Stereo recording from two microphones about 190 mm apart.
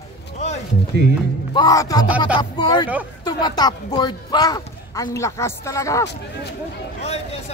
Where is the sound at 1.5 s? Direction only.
20° left (ahead or behind).